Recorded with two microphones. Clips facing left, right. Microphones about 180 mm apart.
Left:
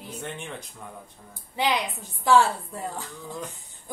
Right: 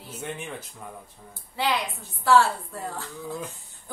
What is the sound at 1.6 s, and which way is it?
A woman's voice, 15° left (ahead or behind).